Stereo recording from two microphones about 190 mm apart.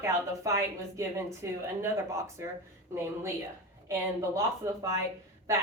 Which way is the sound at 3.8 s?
15° right (ahead or behind).